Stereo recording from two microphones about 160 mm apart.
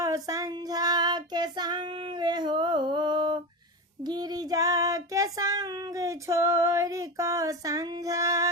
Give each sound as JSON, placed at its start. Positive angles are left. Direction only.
{"t": 0.0, "sound": "child singing", "side_deg": -20}